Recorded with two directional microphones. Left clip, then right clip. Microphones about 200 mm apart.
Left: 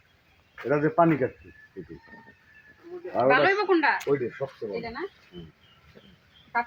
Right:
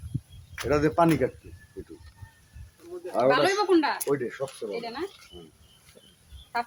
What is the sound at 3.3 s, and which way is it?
Speech, 90° right.